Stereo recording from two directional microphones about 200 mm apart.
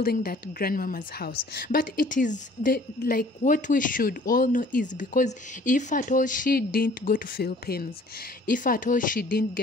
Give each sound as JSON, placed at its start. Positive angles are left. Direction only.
{"t": 0.0, "sound": "a woman's voice", "side_deg": 50}